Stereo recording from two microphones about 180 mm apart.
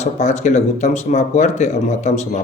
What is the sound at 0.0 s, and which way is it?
Speech, 40° left (ahead or behind).